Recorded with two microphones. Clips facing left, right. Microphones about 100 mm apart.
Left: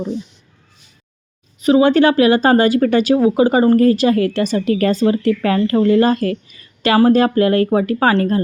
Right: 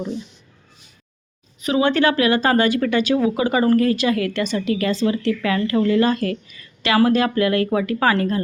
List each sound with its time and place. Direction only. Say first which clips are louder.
1.6 s speech: left 6 dB; 35° left (ahead or behind)